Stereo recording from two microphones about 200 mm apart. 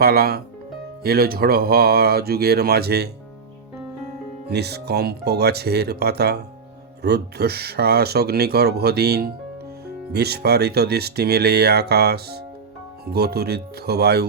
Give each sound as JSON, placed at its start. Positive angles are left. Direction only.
{"t": 0.0, "sound": "speech", "side_deg": -50}
{"t": 4.4, "sound": "speech", "side_deg": -55}